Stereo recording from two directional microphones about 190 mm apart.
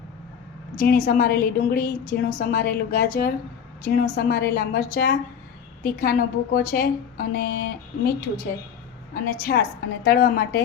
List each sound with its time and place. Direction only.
0.8 s a woman's voice: 50° left (ahead or behind)
9.4 s a woman's voice: 55° left (ahead or behind)